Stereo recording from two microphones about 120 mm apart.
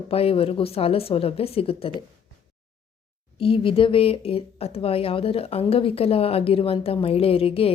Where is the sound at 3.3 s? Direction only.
50° left (ahead or behind).